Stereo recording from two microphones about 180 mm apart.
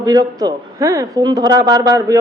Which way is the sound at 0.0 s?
20° right (ahead or behind).